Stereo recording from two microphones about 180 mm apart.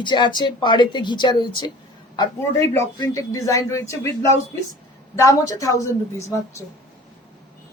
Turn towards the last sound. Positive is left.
turn(degrees=20)  # may be behind; listen again after turning